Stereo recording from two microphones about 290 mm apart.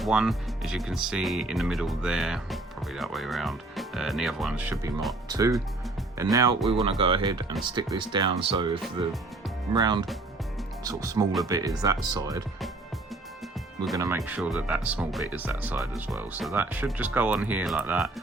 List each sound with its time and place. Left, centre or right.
0.0 s speech: centre
13.9 s speech: centre